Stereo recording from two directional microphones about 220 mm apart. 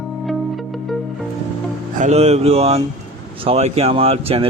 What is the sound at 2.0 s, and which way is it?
Speech, 30° right (ahead or behind).